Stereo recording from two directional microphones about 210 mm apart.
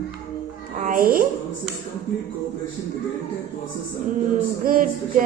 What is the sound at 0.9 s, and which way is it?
Speech, 45° right (ahead or behind).